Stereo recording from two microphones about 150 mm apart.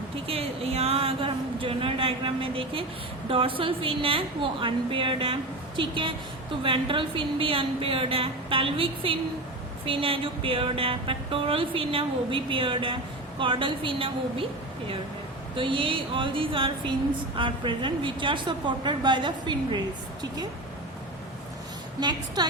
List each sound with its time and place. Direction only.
0.3 s speech: 40° right (ahead or behind)
15.5 s speech: 35° right (ahead or behind)
22.4 s a woman's voice: 25° right (ahead or behind)